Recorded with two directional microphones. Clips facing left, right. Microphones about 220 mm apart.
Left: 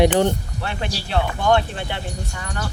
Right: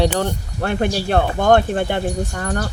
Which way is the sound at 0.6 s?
50° right (ahead or behind).